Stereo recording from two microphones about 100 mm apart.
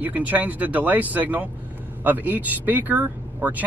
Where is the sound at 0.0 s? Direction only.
15° right (ahead or behind).